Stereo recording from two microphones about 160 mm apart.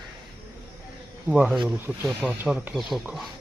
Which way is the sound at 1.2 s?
5° right (ahead or behind).